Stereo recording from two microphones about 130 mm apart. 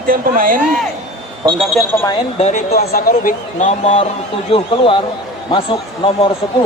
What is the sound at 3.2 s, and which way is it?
Speech, 80° left.